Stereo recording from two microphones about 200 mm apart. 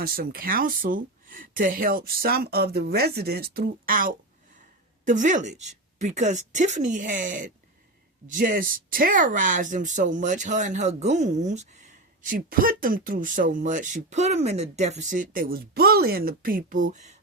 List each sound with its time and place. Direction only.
0.0 s speech: 45° right (ahead or behind)